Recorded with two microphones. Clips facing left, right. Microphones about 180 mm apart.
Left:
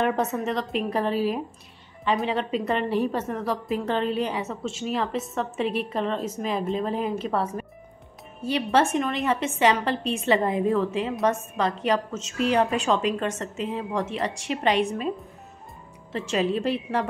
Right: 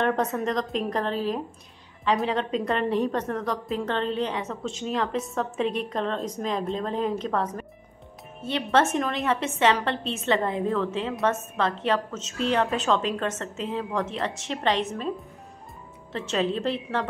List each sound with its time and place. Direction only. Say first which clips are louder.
0.0 s a woman's voice: even; 5° left (ahead or behind)
10.4 s a woman's voice: left 3 dB; 20° left (ahead or behind)
10.8 s a woman's voice: left 2 dB; 5° left (ahead or behind)
16.1 s a woman's voice: left 1 dB; 5° left (ahead or behind)